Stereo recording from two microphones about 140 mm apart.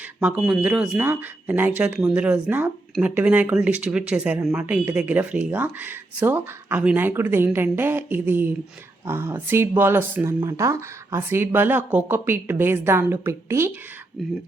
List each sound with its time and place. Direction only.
0.2 s speech: 10° right (ahead or behind)
14.2 s speech: centre (ahead or behind)